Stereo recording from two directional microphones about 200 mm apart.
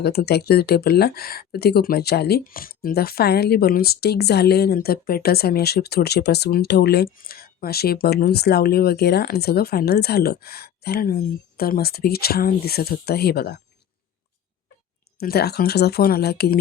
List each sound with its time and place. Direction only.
0.0 s speech: 55° left (ahead or behind)
15.2 s speech: 50° left (ahead or behind)